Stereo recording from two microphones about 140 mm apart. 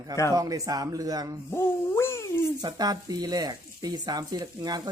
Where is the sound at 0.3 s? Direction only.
25° right (ahead or behind).